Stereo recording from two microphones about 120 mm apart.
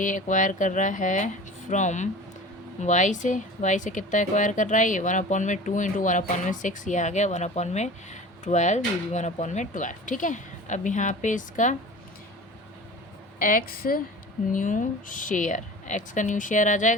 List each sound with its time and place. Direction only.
0.0 s speech: 90° left
14.5 s speech: 90° left